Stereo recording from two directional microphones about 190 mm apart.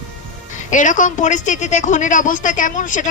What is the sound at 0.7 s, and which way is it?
A woman's voice, 40° left (ahead or behind).